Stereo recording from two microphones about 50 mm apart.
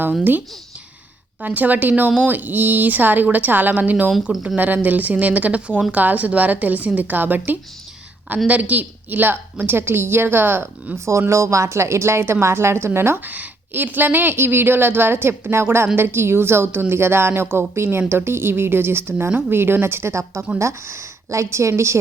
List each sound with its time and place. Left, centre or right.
1.4 s speech: right
10.9 s a woman's voice: right
13.2 s speech: right
20.6 s a woman's voice: right